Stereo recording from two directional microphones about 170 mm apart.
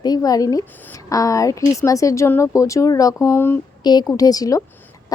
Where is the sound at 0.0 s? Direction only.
20° left (ahead or behind).